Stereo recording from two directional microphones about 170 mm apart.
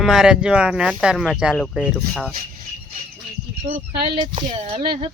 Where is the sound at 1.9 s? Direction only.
10° left (ahead or behind).